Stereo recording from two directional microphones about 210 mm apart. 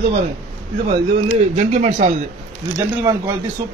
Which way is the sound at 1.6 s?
35° right (ahead or behind).